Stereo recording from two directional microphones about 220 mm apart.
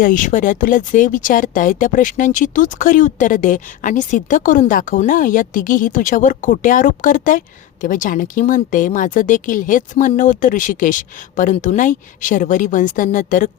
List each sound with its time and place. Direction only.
0.0 s speech: 35° left (ahead or behind)